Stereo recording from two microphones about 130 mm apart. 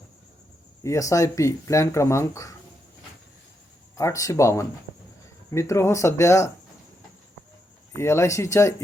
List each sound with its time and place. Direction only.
0.8 s speech: 25° left (ahead or behind)
3.9 s speech: 25° left (ahead or behind)
7.9 s speech: 20° left (ahead or behind)